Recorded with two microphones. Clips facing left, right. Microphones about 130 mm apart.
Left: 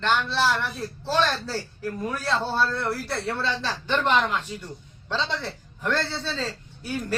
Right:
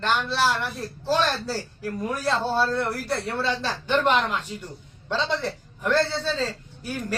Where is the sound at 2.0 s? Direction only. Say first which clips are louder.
Right 2 dB; 5° right (ahead or behind).